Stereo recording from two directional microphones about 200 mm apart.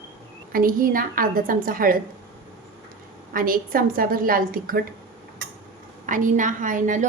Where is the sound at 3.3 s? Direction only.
45° right (ahead or behind).